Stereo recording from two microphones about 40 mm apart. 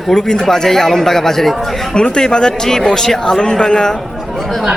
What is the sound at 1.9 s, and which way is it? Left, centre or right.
Speech, left.